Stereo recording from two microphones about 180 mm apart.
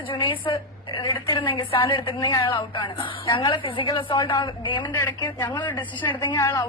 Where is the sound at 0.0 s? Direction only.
30° left (ahead or behind).